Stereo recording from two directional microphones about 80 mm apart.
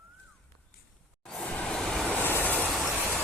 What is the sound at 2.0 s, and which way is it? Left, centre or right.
Train, left.